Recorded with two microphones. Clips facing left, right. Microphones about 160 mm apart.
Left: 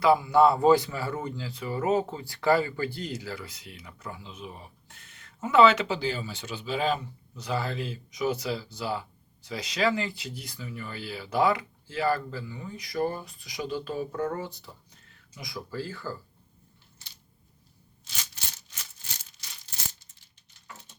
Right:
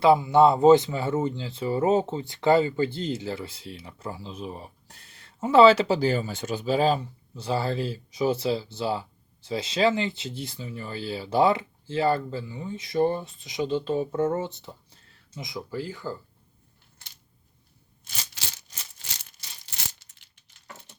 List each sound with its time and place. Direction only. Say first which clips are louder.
0.0 s speech: right 3 dB; 25° right (ahead or behind)
18.4 s a sound: right 2 dB; 90° right
19.7 s coin: right 2 dB; 75° right (ahead or behind)